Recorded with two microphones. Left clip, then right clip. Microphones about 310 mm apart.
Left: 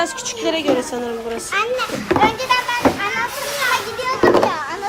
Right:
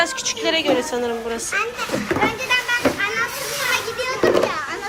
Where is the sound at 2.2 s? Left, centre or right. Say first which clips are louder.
Left 5 dB; left.